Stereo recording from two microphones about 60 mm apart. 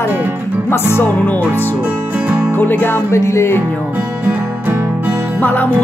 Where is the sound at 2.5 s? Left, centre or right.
Left.